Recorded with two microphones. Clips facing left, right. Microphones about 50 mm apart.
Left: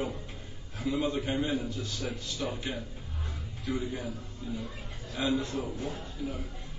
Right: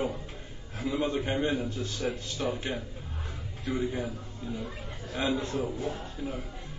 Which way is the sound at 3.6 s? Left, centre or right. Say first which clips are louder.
Right 3 dB; right.